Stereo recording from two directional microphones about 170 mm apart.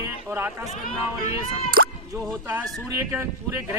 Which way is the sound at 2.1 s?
15° right (ahead or behind).